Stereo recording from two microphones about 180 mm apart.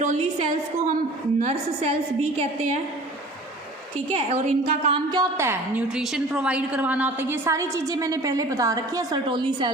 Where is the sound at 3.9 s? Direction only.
40° right (ahead or behind).